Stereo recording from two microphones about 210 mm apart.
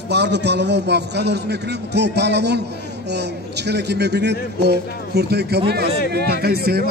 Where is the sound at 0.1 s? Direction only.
55° right (ahead or behind).